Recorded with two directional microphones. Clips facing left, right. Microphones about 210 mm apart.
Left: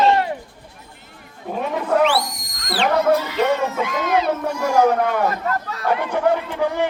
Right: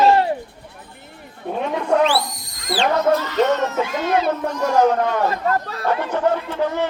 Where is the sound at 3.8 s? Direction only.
30° right (ahead or behind).